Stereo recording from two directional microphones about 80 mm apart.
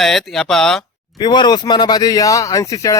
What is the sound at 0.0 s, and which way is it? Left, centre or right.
Speech, centre.